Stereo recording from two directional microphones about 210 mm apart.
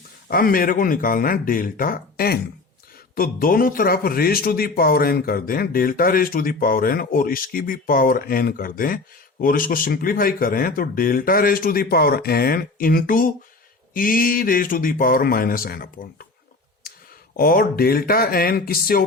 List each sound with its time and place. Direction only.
0.3 s a man's voice: 45° left (ahead or behind)
16.8 s clicking: 45° left (ahead or behind)
17.3 s a man's voice: 45° left (ahead or behind)